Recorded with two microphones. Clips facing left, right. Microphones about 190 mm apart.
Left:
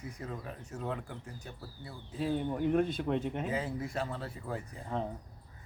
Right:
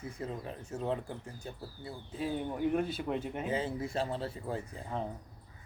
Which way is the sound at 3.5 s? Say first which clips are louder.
Right 1 dB; 25° right (ahead or behind).